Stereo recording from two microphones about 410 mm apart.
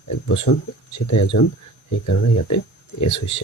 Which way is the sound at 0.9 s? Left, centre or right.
Left.